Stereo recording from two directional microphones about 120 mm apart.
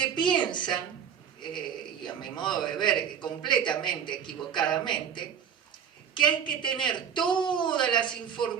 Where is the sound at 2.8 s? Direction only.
40° left (ahead or behind).